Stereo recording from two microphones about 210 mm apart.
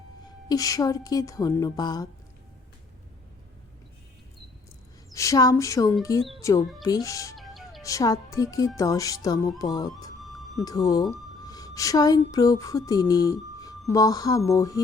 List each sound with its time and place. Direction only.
0.4 s speech: 15° left (ahead or behind)
5.1 s speech: 15° left (ahead or behind)
7.3 s music: centre (ahead or behind)
7.8 s a woman's voice: 15° left (ahead or behind)